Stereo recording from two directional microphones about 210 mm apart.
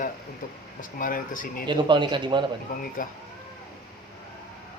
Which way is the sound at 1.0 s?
40° left (ahead or behind).